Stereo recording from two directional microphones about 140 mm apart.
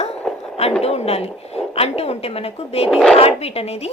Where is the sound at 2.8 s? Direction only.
Centre (ahead or behind).